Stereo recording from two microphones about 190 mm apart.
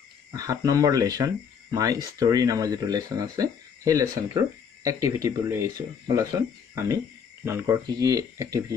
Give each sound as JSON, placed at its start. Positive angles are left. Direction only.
{"t": 0.3, "sound": "speech", "side_deg": -20}